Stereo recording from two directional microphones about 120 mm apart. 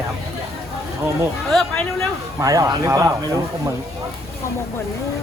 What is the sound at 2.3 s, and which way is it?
Speech, 30° right (ahead or behind).